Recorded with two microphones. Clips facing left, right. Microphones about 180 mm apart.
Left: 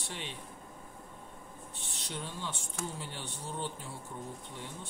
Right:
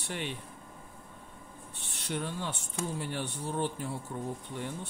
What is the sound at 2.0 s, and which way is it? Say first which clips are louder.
Speech: right 6 dB; 60° right (ahead or behind).